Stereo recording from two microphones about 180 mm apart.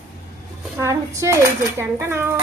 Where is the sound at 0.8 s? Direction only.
15° right (ahead or behind).